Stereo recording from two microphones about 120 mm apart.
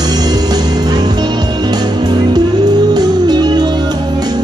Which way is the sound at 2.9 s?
35° right (ahead or behind).